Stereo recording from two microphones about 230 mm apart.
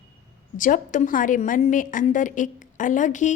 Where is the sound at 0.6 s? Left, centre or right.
Left.